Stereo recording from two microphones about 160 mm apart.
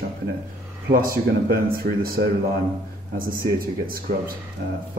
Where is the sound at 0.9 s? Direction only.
65° right (ahead or behind).